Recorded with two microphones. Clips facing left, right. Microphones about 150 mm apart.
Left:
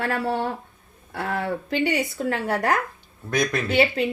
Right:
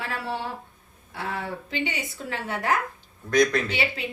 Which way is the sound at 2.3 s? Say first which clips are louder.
Left 3 dB; 45° left (ahead or behind).